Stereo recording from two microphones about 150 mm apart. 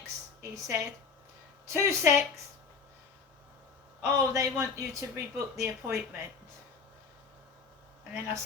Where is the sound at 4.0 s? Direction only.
20° right (ahead or behind).